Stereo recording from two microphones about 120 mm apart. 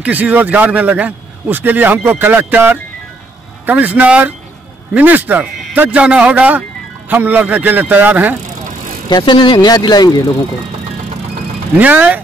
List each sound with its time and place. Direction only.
0.0 s speech: 15° right (ahead or behind)
9.1 s speech: 40° left (ahead or behind)
11.7 s speech: 15° right (ahead or behind)